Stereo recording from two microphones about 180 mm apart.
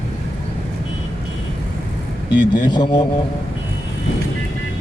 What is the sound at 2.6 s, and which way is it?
Speech, 25° left (ahead or behind).